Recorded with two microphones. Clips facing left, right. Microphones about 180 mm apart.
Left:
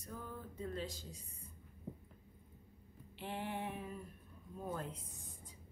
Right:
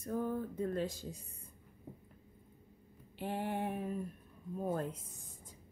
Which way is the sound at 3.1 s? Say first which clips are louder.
Right 5 dB; 45° right (ahead or behind).